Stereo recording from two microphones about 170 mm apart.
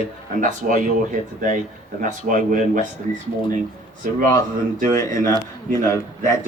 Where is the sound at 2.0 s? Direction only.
50° right (ahead or behind).